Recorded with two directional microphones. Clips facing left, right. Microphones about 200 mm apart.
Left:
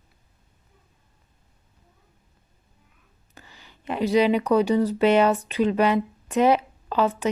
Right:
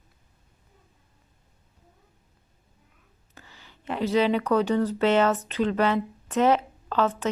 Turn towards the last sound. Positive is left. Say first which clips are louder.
# left 2 dB
turn(degrees=10)  # may be behind; listen again after turning